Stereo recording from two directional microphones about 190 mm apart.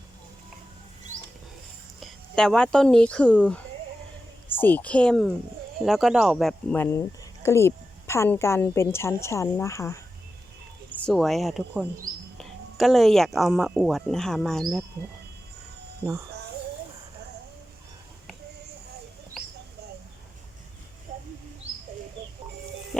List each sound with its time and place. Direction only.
2.0 s a woman's voice: 5° left (ahead or behind)
11.0 s speech: centre (ahead or behind)
21.1 s bird: 40° right (ahead or behind)